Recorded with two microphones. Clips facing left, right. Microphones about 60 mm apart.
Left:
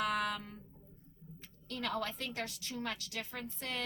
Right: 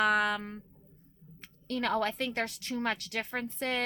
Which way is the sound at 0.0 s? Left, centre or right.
Right.